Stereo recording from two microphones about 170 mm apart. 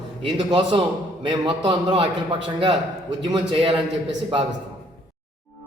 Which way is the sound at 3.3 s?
30° right (ahead or behind).